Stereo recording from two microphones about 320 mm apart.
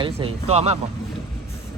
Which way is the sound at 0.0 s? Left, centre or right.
Centre.